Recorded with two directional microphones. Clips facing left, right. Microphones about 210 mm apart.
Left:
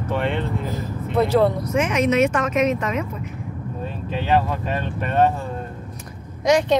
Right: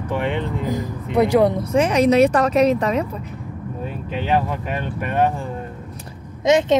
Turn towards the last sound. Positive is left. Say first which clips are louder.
# right 2 dB
turn(degrees=-20)  # may be behind; listen again after turning